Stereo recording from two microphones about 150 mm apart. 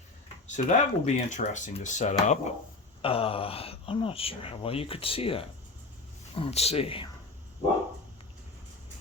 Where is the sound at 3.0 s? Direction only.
40° left (ahead or behind).